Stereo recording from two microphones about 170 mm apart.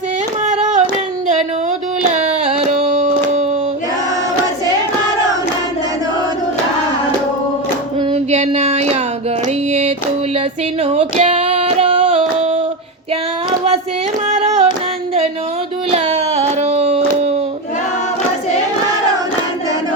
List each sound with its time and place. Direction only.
0.4 s singing: 45° right (ahead or behind)
2.8 s hands: 45° right (ahead or behind)
8.1 s a sound: 40° right (ahead or behind)
10.8 s female singing: 35° right (ahead or behind)
14.3 s music: 40° right (ahead or behind)
15.9 s a sound: 35° right (ahead or behind)